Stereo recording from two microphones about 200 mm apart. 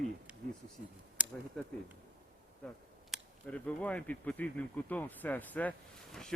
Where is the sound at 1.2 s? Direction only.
5° right (ahead or behind).